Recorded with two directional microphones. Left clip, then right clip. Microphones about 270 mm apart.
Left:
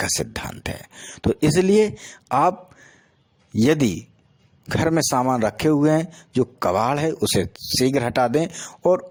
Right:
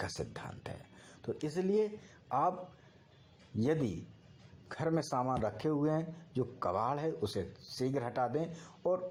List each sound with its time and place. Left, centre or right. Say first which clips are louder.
0.0 s a man's voice: left 16 dB; left
3.6 s a man's voice: left 15 dB; left